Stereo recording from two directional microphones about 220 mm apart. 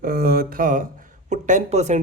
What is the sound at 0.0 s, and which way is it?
Speech, 40° right (ahead or behind).